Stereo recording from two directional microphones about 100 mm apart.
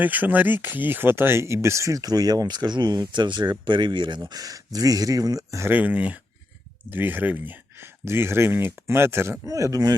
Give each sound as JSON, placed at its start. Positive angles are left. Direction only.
{"t": 0.0, "sound": "speech", "side_deg": -15}
{"t": 4.3, "sound": "speech", "side_deg": -40}
{"t": 5.7, "sound": "speech", "side_deg": -15}